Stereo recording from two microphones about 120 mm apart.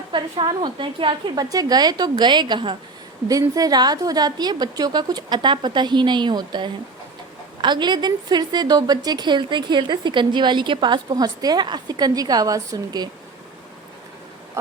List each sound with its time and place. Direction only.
0.1 s a woman's voice: 40° right (ahead or behind)
1.5 s a woman's voice: 35° right (ahead or behind)
3.4 s a woman's voice: 30° right (ahead or behind)